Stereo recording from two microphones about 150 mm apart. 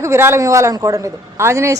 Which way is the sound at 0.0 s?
15° right (ahead or behind).